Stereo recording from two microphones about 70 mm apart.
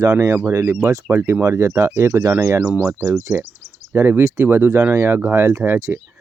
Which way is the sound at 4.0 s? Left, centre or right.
Right.